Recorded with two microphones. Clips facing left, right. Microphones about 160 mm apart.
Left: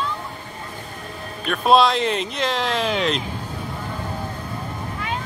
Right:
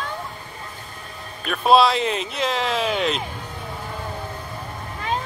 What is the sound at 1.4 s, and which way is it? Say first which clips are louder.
Speech: even; centre (ahead or behind).